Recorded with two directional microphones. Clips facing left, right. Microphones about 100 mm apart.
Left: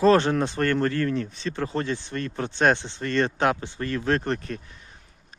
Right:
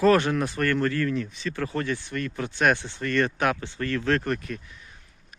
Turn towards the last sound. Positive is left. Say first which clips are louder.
# left 1 dB
turn(degrees=35)  # may be behind; listen again after turning